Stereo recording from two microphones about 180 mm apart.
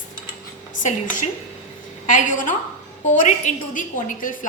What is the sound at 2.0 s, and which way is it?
A woman's voice, 45° left (ahead or behind).